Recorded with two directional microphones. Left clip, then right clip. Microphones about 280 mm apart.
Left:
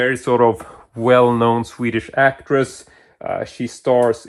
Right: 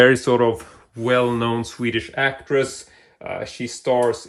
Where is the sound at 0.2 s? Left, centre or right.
Centre.